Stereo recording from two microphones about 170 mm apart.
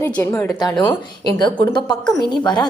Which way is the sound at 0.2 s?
10° left (ahead or behind).